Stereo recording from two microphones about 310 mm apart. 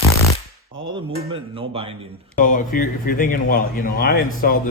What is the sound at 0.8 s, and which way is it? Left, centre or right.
Speech, centre.